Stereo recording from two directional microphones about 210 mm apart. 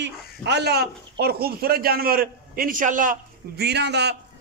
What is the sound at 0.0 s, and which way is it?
A man's voice, 55° right (ahead or behind).